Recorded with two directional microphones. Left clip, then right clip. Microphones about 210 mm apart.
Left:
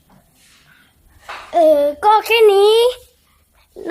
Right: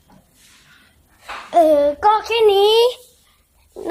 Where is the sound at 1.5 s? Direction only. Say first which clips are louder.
Left 1 dB; 5° right (ahead or behind).